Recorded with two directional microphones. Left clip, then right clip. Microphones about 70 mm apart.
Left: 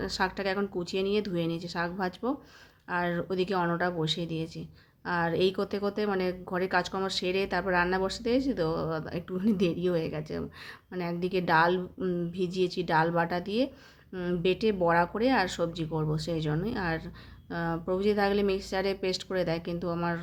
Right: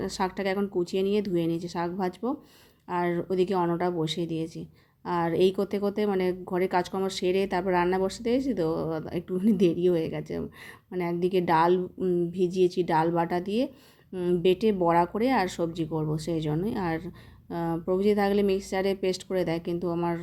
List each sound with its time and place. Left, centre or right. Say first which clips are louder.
0.0 s speech: right 1 dB; right
14.1 s a woman's voice: right 5 dB; right
14.4 s a woman's voice: right 2 dB; right